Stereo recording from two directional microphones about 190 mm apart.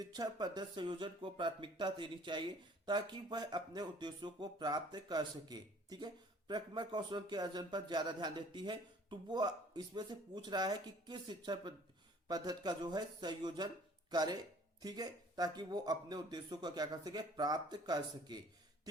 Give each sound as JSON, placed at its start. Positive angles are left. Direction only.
{"t": 0.0, "sound": "speech", "side_deg": -20}